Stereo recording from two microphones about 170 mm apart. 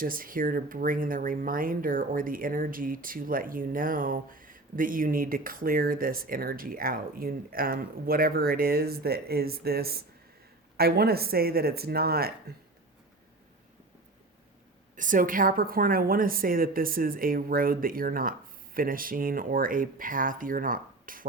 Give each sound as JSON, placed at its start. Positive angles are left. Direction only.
{"t": 0.0, "sound": "speech", "side_deg": -55}
{"t": 14.9, "sound": "speech", "side_deg": -50}